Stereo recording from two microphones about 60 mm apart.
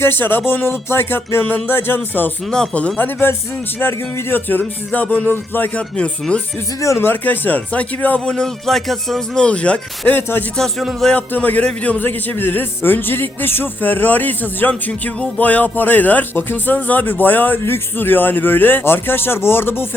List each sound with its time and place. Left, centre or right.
0.0 s a man's voice: left
2.5 s speech: centre
3.8 s a man's voice: left
6.0 s speech: centre
7.0 s speech: left; by 9.4 s centre
9.4 s speech: centre
10.1 s a man's voice: left